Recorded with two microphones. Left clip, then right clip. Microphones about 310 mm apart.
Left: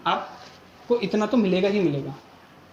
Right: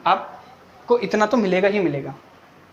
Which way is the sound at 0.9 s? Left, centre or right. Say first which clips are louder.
Right 4 dB; right.